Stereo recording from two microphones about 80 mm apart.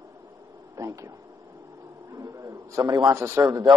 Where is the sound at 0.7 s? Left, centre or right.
Right.